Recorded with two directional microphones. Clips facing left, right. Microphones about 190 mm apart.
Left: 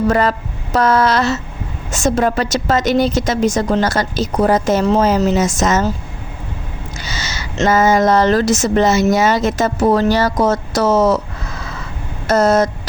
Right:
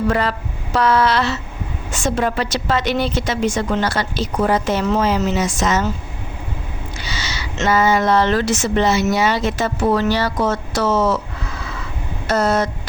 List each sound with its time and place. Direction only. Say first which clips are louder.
0.1 s a woman's voice: left 4 dB; 45° left (ahead or behind)
7.0 s speech: left 1 dB; 45° left (ahead or behind)
12.3 s a sound: left 5 dB; 40° left (ahead or behind)